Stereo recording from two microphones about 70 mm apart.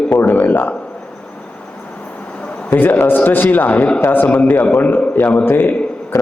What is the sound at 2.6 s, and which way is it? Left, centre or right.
A man's voice, left.